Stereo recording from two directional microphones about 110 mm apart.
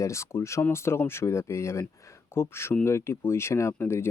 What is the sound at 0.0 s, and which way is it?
Speech, 25° left (ahead or behind).